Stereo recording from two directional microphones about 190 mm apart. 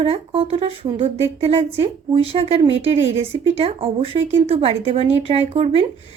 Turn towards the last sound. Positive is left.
turn(degrees=-30)  # may be behind; listen again after turning